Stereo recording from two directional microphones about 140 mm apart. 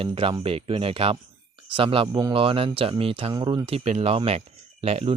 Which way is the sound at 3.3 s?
30° right (ahead or behind).